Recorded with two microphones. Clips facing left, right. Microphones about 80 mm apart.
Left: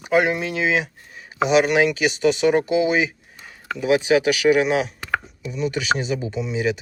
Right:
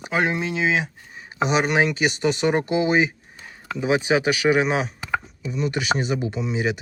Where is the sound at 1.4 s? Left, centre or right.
Right.